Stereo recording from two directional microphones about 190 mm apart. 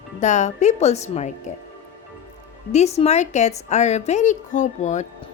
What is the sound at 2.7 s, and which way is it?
Speech, 35° left (ahead or behind).